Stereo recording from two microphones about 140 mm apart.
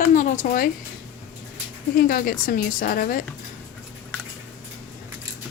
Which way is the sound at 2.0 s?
90° left.